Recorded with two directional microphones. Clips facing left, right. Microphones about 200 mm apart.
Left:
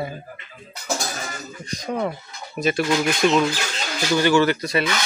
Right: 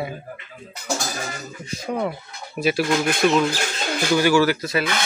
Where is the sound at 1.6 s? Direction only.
5° right (ahead or behind).